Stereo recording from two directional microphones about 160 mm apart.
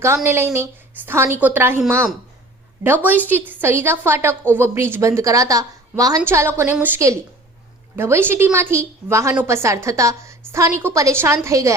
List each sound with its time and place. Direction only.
0.3 s a woman's voice: 15° right (ahead or behind)
2.8 s a woman's voice: 10° right (ahead or behind)